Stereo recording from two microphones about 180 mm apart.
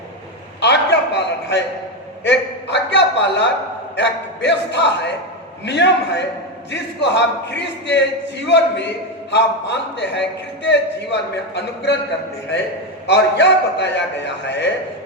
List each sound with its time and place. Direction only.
0.6 s a sound: 75° left (ahead or behind)
3.9 s a man's voice: 80° left
13.1 s a man's voice: 70° left (ahead or behind)